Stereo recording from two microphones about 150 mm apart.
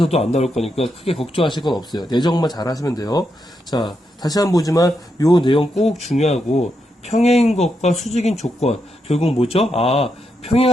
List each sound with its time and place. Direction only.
0.0 s speech: 45° left (ahead or behind)
5.8 s speech: 45° left (ahead or behind)